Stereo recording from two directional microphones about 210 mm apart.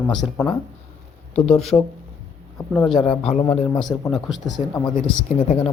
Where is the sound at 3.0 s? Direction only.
20° left (ahead or behind).